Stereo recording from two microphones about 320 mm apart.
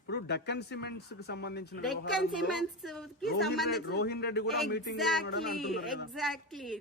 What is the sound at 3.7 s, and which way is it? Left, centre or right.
A man's voice, left.